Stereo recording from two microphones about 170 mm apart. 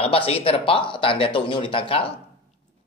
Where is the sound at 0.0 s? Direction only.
35° left (ahead or behind).